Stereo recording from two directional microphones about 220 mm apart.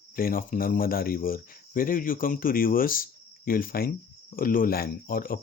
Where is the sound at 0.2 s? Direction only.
40° left (ahead or behind).